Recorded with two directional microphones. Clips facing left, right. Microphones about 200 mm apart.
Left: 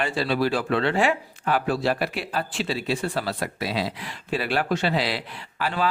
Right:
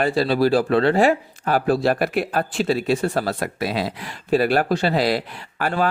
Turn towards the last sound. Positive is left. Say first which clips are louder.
# right 5 dB
turn(degrees=-45)  # may be behind; listen again after turning